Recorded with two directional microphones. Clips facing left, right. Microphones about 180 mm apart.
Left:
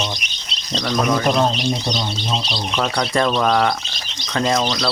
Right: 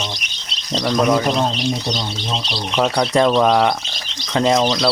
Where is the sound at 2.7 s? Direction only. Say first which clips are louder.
Right 4 dB; 15° right (ahead or behind).